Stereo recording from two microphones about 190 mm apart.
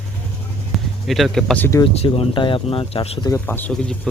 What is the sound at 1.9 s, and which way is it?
Speech, 30° left (ahead or behind).